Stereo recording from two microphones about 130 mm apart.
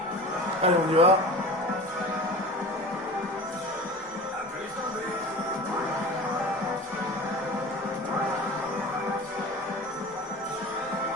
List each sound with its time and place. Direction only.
0.6 s a man's voice: 50° right (ahead or behind)